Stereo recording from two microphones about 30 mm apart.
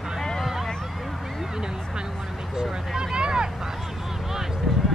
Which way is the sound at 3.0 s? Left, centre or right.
Right.